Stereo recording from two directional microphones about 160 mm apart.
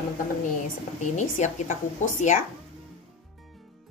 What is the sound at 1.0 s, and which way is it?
Speech, 50° left (ahead or behind).